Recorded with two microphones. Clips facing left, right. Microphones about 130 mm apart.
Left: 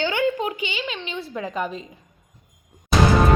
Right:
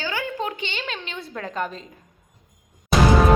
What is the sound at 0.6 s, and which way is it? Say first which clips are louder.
A child's voice: left 2 dB; 5° left (ahead or behind).